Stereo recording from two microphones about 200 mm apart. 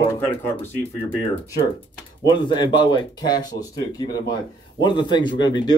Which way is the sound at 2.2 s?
20° left (ahead or behind).